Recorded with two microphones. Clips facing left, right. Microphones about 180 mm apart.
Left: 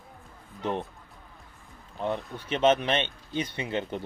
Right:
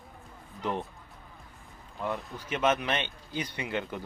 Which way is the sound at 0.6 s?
20° left (ahead or behind).